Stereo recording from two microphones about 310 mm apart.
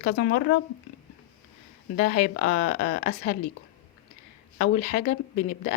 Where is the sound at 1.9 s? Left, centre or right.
Left.